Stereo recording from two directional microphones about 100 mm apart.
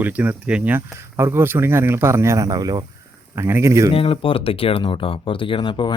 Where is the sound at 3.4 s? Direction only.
25° right (ahead or behind).